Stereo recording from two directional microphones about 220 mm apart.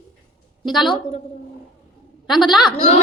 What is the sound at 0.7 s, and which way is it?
Speech, 20° left (ahead or behind).